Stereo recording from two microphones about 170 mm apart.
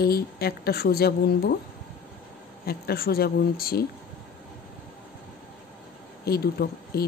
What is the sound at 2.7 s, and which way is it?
A woman's voice, 65° left (ahead or behind).